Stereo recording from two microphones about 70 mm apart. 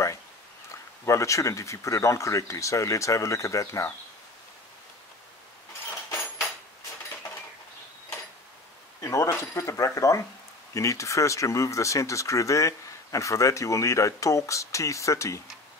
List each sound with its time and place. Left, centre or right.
1.0 s speech: left
9.0 s speech: left